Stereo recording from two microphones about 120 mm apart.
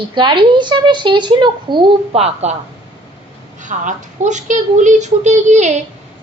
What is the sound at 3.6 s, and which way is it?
A woman's voice, 90° right.